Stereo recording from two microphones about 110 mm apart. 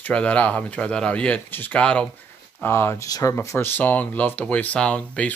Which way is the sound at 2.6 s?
20° left (ahead or behind).